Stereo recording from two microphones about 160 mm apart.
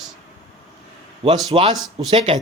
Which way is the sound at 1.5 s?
35° right (ahead or behind).